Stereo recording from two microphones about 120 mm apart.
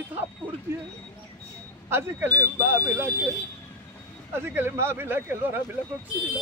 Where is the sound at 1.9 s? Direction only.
20° right (ahead or behind).